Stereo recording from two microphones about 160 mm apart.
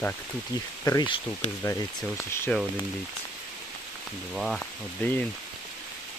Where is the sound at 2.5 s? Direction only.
5° left (ahead or behind).